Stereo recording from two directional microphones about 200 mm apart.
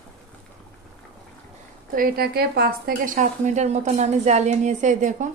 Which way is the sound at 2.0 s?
50° right (ahead or behind).